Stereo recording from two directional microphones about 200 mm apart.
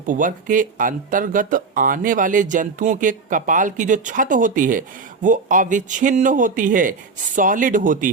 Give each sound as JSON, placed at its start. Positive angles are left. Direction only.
{"t": 0.0, "sound": "speech", "side_deg": -40}